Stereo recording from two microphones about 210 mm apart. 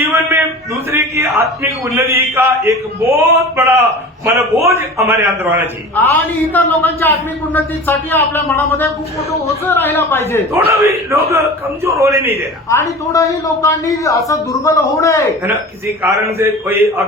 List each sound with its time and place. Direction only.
0.0 s a sound: 15° right (ahead or behind)
2.3 s a man's voice: 15° right (ahead or behind)
6.0 s a man's voice: 10° left (ahead or behind)
10.7 s a man's voice: 15° right (ahead or behind)
12.7 s a man's voice: 15° left (ahead or behind)
16.0 s a man's voice: 15° right (ahead or behind)